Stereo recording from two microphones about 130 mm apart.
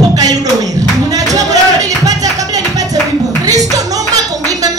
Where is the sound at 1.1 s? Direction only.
25° right (ahead or behind).